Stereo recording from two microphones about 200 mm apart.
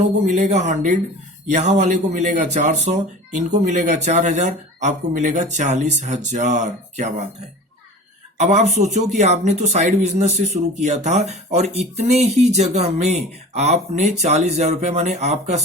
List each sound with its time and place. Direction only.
0.0 s speech: 35° right (ahead or behind)
8.4 s speech: 35° right (ahead or behind)